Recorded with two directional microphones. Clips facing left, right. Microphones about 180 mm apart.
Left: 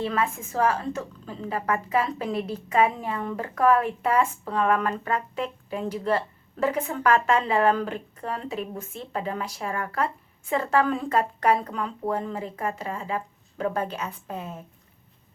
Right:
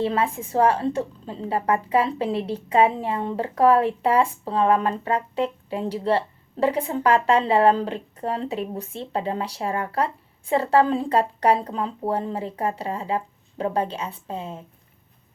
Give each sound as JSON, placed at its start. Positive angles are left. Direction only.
{"t": 0.0, "sound": "a woman's voice", "side_deg": -30}